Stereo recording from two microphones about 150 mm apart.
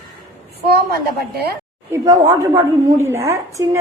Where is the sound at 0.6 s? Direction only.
90° right.